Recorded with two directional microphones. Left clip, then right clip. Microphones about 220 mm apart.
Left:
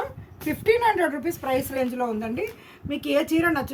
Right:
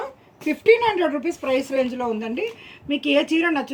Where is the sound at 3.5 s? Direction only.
15° left (ahead or behind).